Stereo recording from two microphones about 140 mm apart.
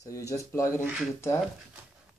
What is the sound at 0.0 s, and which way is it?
Speech, 25° left (ahead or behind).